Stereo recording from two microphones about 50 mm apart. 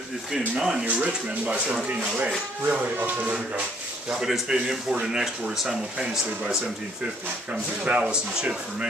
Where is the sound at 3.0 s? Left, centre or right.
Right.